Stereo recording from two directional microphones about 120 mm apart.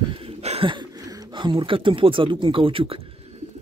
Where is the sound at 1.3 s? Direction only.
45° right (ahead or behind).